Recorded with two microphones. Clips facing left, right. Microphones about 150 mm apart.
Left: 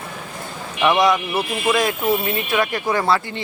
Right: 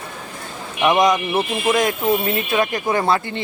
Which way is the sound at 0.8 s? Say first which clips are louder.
Right 1 dB; 15° right (ahead or behind).